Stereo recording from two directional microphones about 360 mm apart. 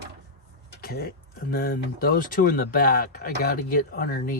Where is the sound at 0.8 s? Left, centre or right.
Left.